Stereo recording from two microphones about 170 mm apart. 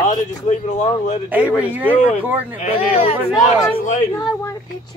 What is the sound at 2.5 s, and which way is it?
Speech, 40° left (ahead or behind).